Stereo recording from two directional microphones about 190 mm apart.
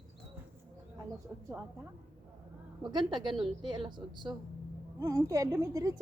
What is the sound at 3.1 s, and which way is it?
A woman's voice, 25° right (ahead or behind).